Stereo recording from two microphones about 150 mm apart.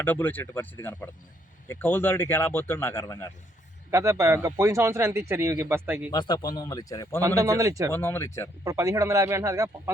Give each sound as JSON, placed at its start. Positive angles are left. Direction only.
{"t": 0.0, "sound": "speech", "side_deg": 10}
{"t": 3.9, "sound": "a man's voice", "side_deg": -20}
{"t": 6.1, "sound": "speech", "side_deg": 30}
{"t": 7.2, "sound": "a man's voice", "side_deg": -25}
{"t": 7.9, "sound": "speech", "side_deg": 15}
{"t": 8.6, "sound": "a man's voice", "side_deg": -20}